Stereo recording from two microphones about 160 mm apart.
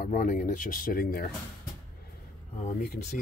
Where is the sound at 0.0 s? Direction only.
60° left (ahead or behind).